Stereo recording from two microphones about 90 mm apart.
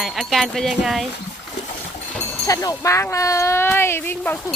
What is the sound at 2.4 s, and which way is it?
Speech, 40° left (ahead or behind).